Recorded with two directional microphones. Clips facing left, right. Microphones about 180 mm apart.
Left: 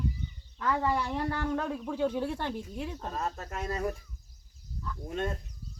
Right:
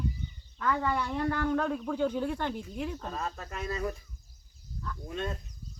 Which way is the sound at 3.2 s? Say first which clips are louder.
Left 1 dB; 45° left (ahead or behind).